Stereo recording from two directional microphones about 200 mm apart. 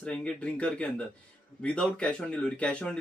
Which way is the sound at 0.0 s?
5° left (ahead or behind).